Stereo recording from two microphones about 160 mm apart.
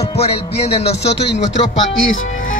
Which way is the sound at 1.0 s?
90° left.